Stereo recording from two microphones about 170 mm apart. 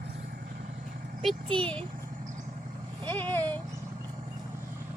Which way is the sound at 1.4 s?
30° right (ahead or behind).